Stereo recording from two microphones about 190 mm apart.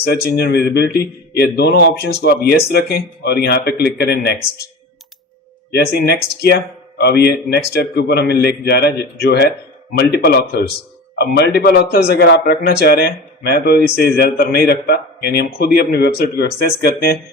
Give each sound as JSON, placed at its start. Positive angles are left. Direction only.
{"t": 0.0, "sound": "a man's voice", "side_deg": 55}
{"t": 5.7, "sound": "a man's voice", "side_deg": 55}